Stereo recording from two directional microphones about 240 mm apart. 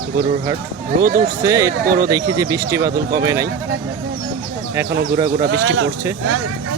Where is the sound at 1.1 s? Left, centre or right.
Centre.